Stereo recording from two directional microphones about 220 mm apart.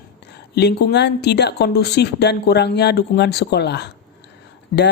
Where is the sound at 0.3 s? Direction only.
50° left (ahead or behind).